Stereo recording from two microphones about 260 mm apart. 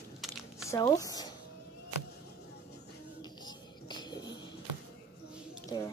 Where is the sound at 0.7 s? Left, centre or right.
Centre.